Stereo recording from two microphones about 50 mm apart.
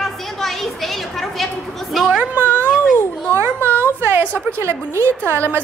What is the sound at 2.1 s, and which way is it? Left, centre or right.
Speech, right.